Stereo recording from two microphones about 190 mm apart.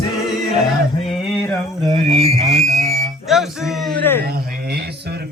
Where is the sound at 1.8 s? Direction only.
30° right (ahead or behind).